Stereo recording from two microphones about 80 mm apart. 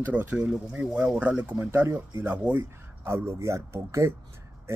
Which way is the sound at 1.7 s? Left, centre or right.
Right.